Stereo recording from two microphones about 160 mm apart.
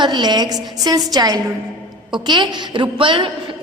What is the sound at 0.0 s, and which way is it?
A woman's voice, 25° right (ahead or behind).